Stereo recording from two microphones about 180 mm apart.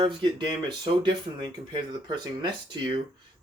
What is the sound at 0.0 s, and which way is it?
Speech, 30° right (ahead or behind).